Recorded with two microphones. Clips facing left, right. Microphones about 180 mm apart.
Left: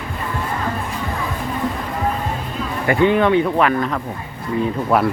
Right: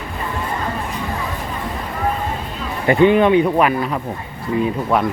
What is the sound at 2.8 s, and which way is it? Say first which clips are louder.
Speech: right 3 dB; 20° right (ahead or behind).